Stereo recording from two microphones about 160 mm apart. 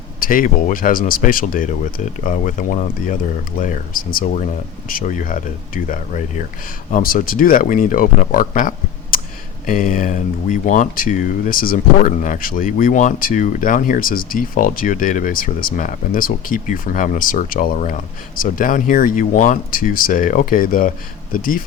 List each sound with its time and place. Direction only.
0.2 s speech: 60° left (ahead or behind)